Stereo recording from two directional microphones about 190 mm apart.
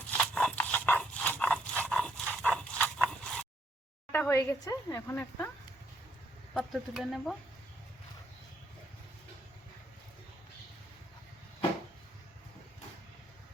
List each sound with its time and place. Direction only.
0.1 s dog: 5° left (ahead or behind)
4.1 s a woman's voice: 10° left (ahead or behind)
6.5 s speech: centre (ahead or behind)